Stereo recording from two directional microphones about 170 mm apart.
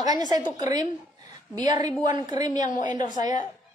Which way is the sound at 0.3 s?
20° right (ahead or behind).